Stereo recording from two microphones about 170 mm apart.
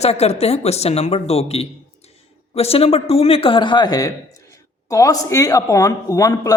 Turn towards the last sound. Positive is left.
turn(degrees=20)  # may be behind; listen again after turning